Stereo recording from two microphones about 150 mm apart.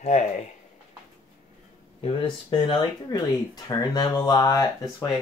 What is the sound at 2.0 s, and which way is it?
Speech, 35° left (ahead or behind).